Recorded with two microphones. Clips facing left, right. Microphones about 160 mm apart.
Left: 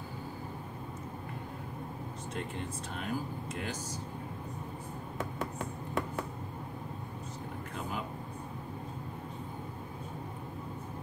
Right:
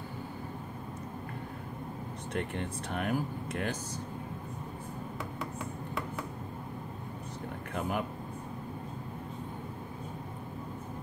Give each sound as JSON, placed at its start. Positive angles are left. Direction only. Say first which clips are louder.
{"t": 2.9, "sound": "speech", "louder": "right 5 dB", "side_deg": -60}